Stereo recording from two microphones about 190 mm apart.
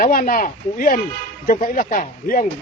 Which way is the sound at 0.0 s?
50° left (ahead or behind).